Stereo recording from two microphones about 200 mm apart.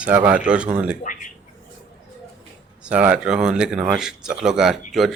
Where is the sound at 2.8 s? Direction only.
5° right (ahead or behind).